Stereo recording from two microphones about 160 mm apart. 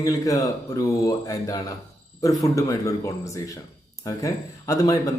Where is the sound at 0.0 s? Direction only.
20° left (ahead or behind).